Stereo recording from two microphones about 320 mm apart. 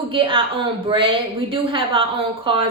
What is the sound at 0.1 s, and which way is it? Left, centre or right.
A woman's voice, centre.